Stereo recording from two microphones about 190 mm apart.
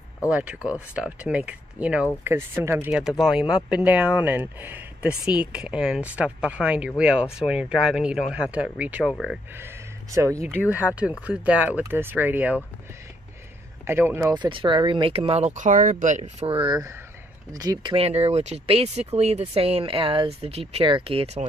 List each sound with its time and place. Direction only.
0.3 s speech: 5° right (ahead or behind)
10.1 s speech: 15° right (ahead or behind)
13.8 s speech: 10° right (ahead or behind)
14.3 s speech: 25° right (ahead or behind)